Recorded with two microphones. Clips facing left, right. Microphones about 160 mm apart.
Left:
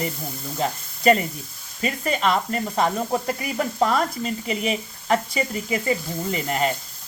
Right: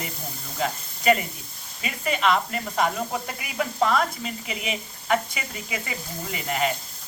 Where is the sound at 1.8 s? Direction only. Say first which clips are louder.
Left 2 dB; 40° left (ahead or behind).